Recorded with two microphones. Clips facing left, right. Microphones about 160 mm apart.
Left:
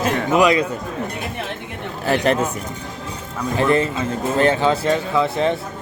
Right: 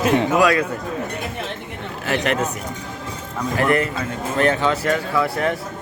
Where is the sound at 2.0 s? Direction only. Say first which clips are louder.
Left 3 dB; 35° left (ahead or behind).